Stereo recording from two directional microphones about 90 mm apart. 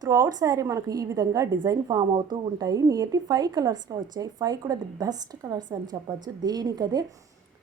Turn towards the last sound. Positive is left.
turn(degrees=-50)  # may be behind; listen again after turning